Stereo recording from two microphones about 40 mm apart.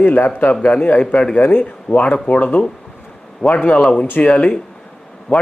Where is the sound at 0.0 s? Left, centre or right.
Left.